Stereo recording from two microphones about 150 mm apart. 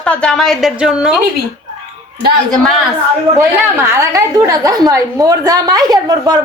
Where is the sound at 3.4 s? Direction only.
20° right (ahead or behind).